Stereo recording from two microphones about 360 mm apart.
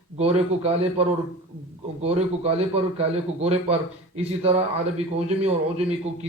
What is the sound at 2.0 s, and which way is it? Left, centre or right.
A man's voice, centre.